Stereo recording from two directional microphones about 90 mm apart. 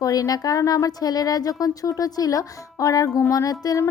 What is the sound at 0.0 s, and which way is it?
Speech, 40° left (ahead or behind).